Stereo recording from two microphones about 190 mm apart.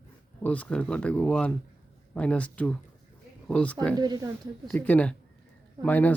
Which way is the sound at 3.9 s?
20° right (ahead or behind).